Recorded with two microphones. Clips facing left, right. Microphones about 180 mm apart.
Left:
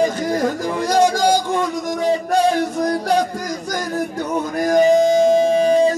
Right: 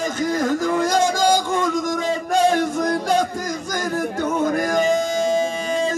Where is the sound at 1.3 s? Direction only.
50° right (ahead or behind).